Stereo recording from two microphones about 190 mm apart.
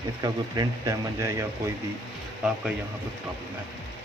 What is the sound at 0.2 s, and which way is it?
A man's voice, 20° right (ahead or behind).